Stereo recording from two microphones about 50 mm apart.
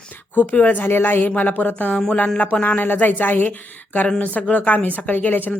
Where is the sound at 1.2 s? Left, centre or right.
Left.